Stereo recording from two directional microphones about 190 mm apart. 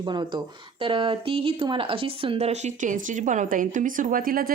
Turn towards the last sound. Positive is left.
turn(degrees=-50)  # may be behind; listen again after turning